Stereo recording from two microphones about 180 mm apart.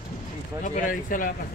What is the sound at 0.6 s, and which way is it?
Speech, 45° left (ahead or behind).